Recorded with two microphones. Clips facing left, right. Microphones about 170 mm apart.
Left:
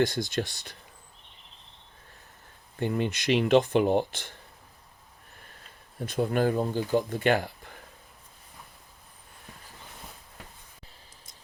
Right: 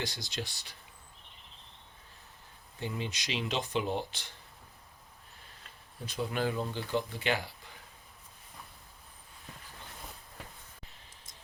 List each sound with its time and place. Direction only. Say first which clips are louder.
0.0 s speech: left 12 dB; 50° left (ahead or behind)
2.7 s speech: left 9 dB; 55° left (ahead or behind)
6.1 s speech: left 7 dB; 50° left (ahead or behind)